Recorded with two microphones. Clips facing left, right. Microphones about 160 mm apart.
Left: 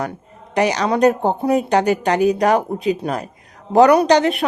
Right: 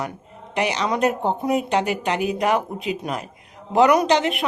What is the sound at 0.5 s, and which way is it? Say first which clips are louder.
A woman's voice: left 5 dB; 40° left (ahead or behind).